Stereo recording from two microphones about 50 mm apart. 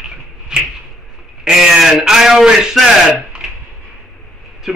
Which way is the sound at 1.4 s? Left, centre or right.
Centre.